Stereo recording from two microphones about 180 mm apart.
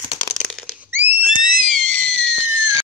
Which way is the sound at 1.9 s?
35° left (ahead or behind).